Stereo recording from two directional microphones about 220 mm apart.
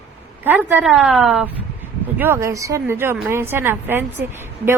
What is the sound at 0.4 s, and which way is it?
A woman's voice, 10° right (ahead or behind).